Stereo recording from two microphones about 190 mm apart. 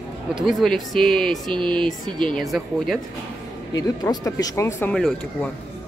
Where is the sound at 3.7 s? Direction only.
20° left (ahead or behind); by 5.4 s centre (ahead or behind).